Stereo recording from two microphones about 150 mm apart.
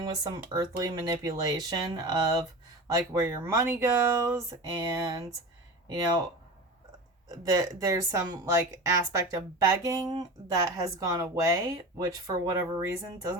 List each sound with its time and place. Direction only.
0.0 s speech: 25° right (ahead or behind)